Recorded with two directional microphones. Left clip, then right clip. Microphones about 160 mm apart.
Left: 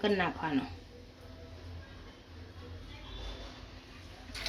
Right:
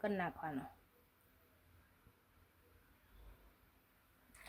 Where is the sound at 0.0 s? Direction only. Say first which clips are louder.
Left 10 dB; 60° right (ahead or behind).